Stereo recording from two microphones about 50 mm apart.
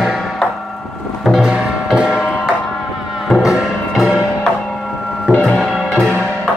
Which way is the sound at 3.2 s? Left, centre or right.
Centre.